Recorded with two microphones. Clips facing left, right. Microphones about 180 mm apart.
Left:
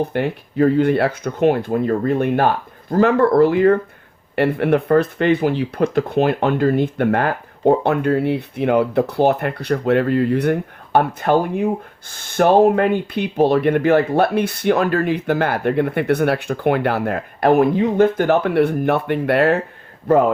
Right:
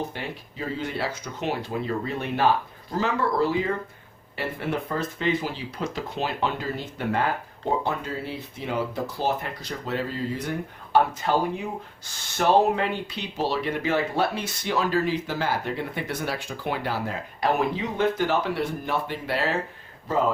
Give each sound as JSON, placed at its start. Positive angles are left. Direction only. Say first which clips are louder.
{"t": 0.1, "sound": "speech", "louder": "left 13 dB", "side_deg": 60}